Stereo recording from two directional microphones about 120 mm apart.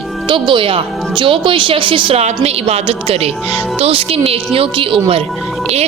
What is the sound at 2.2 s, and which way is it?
A woman's voice, 60° right (ahead or behind).